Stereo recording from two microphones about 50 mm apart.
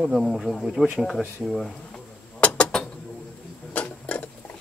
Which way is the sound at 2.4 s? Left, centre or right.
Left.